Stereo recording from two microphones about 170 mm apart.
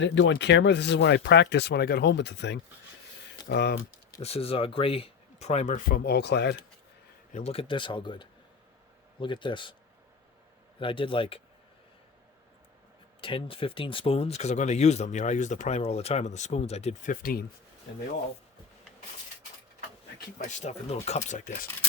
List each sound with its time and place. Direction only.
0.0 s speech: 90° left
3.5 s speech: 75° left (ahead or behind)
4.2 s speech: 35° left (ahead or behind); by 6.6 s 85° left
7.3 s speech: 35° left (ahead or behind)
10.8 s speech: 30° left (ahead or behind)
13.2 s speech: 30° left (ahead or behind)
17.1 s speech: 55° left (ahead or behind)
20.6 s speech: 40° left (ahead or behind)